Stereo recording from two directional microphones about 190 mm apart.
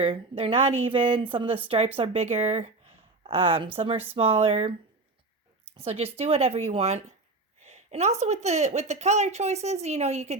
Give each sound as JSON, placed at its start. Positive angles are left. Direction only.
{"t": 0.0, "sound": "a woman's voice", "side_deg": -30}
{"t": 5.7, "sound": "a woman's voice", "side_deg": -30}
{"t": 7.6, "sound": "a sound", "side_deg": -35}
{"t": 8.2, "sound": "a woman's voice", "side_deg": -35}